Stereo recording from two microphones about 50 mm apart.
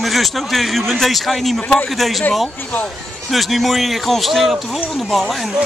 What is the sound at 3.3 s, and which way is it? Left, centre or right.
Speech, centre.